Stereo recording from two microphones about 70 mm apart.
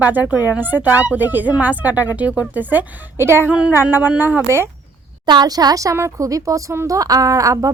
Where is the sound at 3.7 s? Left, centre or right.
Right.